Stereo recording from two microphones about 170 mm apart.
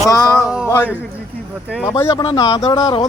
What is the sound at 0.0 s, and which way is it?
Music, 20° left (ahead or behind).